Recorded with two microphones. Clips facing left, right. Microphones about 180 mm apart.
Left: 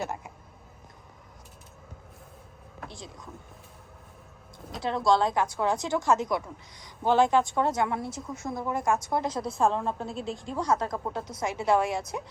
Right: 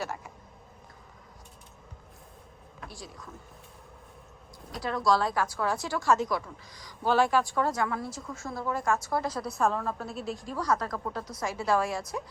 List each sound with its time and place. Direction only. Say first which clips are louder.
0.0 s a sound: left 2 dB; 20° left (ahead or behind)
2.8 s speech: left 1 dB; 20° left (ahead or behind)
4.7 s a woman's voice: left 2 dB; 25° left (ahead or behind)